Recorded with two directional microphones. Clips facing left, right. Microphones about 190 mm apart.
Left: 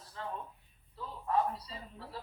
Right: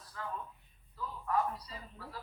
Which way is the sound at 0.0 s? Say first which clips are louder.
Left 1 dB; 25° left (ahead or behind).